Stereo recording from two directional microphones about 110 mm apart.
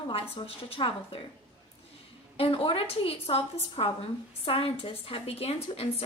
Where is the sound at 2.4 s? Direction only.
60° left (ahead or behind).